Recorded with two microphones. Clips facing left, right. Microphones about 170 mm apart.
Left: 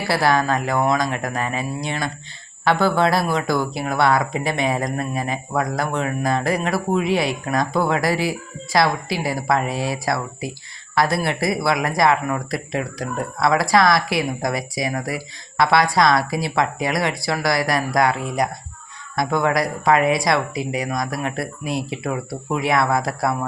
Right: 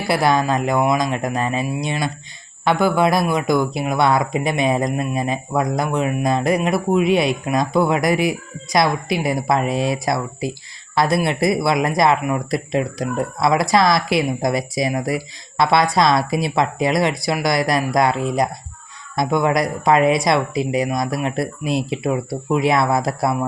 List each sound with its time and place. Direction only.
0.1 s speech: 20° right (ahead or behind)